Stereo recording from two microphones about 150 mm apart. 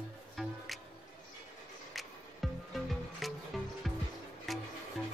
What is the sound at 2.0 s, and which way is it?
Music, centre (ahead or behind).